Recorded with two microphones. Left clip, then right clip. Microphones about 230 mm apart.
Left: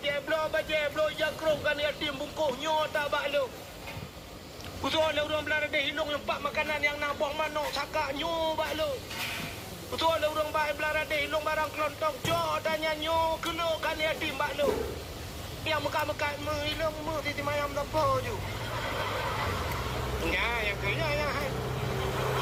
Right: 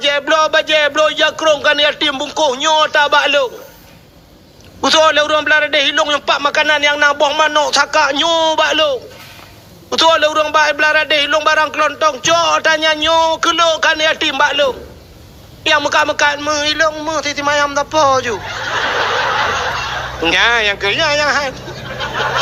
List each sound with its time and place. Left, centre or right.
0.0 s a sound: right
4.8 s a man's voice: right
9.9 s a man's voice: right